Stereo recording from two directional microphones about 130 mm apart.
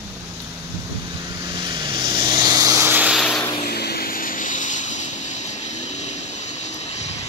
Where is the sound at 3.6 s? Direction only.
90° left.